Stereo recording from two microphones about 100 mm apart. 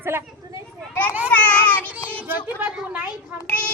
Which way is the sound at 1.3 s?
15° left (ahead or behind).